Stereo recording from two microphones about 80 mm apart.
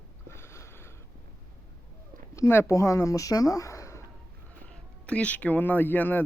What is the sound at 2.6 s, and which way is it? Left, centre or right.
Speech, left.